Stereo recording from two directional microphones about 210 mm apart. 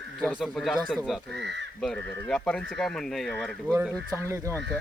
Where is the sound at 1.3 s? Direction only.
55° right (ahead or behind).